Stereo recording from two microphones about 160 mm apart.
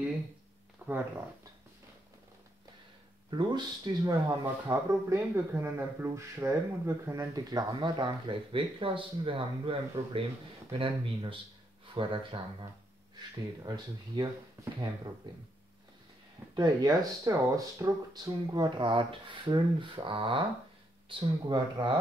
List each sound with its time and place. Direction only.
0.8 s a sound: 10° right (ahead or behind)
3.3 s speech: 25° right (ahead or behind)
13.7 s speech: 25° right (ahead or behind)
16.5 s speech: 25° right (ahead or behind)